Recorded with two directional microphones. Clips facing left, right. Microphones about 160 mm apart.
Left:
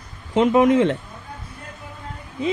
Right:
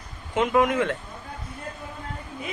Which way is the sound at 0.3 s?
30° left (ahead or behind).